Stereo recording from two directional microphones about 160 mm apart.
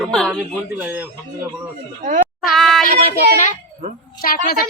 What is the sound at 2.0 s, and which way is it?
Speech, 50° right (ahead or behind).